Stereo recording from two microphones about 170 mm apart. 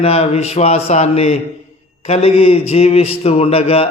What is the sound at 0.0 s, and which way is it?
Speech, 35° left (ahead or behind).